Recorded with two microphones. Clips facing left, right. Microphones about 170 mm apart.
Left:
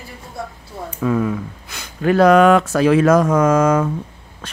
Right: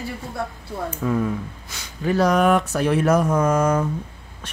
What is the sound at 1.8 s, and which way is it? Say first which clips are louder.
Speech: left 6 dB; 65° left (ahead or behind).